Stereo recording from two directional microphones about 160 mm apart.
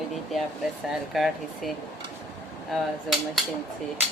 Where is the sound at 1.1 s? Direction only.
Centre (ahead or behind).